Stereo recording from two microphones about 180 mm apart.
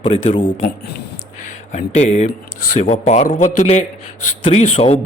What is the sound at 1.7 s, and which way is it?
A man's voice, 35° left (ahead or behind).